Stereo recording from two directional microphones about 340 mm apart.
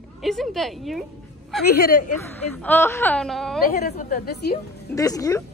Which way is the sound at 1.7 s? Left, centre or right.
Left.